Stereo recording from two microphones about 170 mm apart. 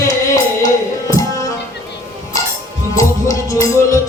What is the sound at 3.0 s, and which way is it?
Music, 20° left (ahead or behind).